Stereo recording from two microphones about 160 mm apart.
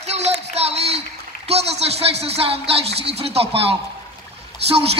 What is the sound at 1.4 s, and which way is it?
Speech, 40° right (ahead or behind).